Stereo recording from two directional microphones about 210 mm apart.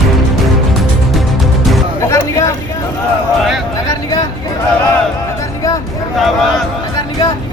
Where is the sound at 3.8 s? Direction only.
15° left (ahead or behind).